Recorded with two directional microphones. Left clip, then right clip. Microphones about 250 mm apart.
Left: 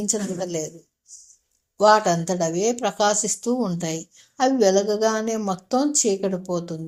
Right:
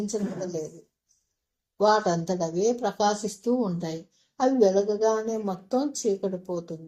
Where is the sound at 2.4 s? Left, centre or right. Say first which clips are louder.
Left 3 dB; left.